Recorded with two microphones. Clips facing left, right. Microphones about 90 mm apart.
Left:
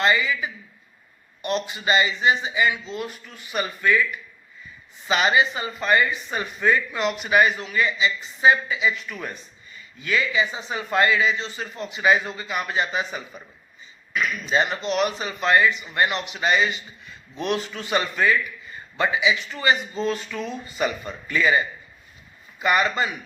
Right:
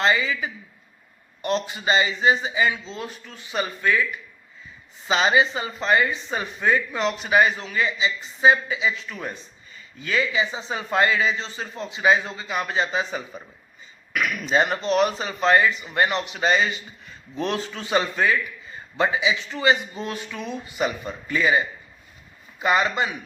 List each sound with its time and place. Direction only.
0.0 s a woman's voice: 30° right (ahead or behind)
5.0 s a woman's voice: 25° right (ahead or behind)
10.0 s a woman's voice: 30° right (ahead or behind)
14.1 s speech: 60° right (ahead or behind)
14.5 s a woman's voice: 40° right (ahead or behind); by 21.6 s 20° right (ahead or behind)
22.6 s a woman's voice: 20° right (ahead or behind)